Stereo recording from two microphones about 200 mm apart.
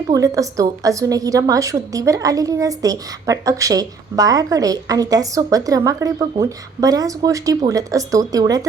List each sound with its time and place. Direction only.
0.1 s a woman's voice: 15° right (ahead or behind)